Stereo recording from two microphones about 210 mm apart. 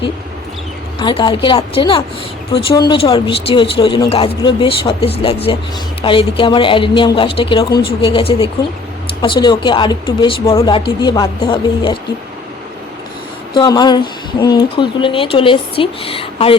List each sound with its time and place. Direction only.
0.9 s speech: 20° left (ahead or behind)
13.5 s speech: 20° left (ahead or behind)